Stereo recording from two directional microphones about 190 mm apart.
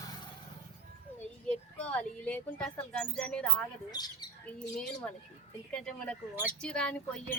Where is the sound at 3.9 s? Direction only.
20° left (ahead or behind).